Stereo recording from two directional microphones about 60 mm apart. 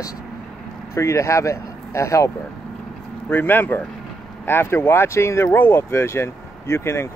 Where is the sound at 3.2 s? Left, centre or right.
Left.